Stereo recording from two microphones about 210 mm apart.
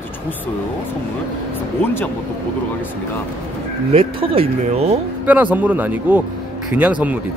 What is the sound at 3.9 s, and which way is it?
Speech, 25° right (ahead or behind).